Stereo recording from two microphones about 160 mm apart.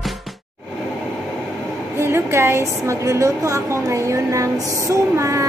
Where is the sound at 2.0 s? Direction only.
15° right (ahead or behind).